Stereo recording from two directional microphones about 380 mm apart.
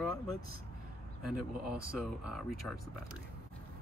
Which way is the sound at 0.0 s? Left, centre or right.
Centre.